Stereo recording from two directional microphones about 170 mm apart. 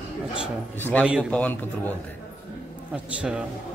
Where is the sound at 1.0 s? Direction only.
5° right (ahead or behind).